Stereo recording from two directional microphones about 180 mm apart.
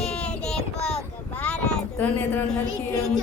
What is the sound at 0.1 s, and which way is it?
Child singing, 5° left (ahead or behind).